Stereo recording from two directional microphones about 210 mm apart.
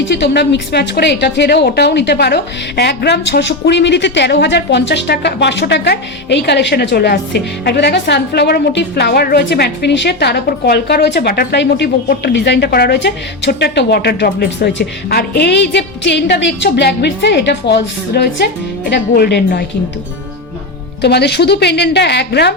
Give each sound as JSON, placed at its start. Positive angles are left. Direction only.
{"t": 0.1, "sound": "a woman's voice", "side_deg": 55}
{"t": 21.0, "sound": "a woman's voice", "side_deg": 50}